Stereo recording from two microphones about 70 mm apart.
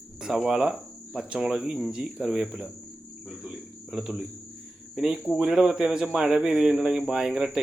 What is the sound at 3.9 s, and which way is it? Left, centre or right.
A man's voice, centre.